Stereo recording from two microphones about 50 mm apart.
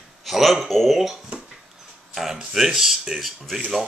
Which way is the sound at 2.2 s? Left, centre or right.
Centre.